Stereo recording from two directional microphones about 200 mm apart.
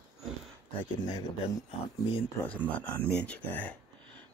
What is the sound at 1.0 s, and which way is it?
Speech, 20° left (ahead or behind).